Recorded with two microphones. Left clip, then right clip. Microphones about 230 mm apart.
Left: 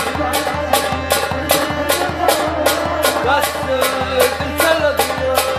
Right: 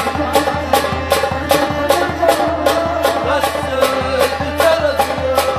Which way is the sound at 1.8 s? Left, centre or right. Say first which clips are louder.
Right 3 dB; left.